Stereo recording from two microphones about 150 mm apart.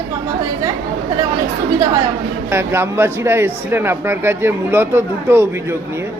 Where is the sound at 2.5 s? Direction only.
15° right (ahead or behind).